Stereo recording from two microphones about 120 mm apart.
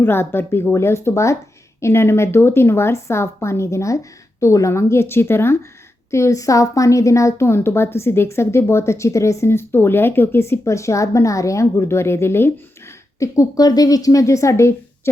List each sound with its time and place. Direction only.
0.0 s a woman's voice: 20° left (ahead or behind)